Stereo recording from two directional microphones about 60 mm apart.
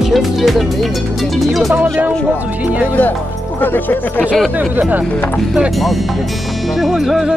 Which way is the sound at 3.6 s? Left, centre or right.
Left.